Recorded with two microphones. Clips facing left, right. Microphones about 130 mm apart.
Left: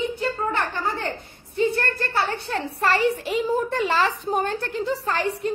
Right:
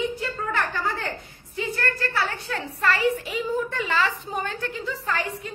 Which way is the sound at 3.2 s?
35° left (ahead or behind).